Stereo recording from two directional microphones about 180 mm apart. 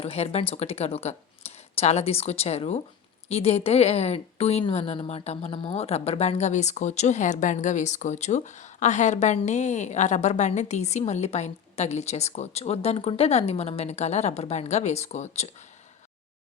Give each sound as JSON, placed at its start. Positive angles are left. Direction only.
{"t": 0.0, "sound": "a woman's voice", "side_deg": 35}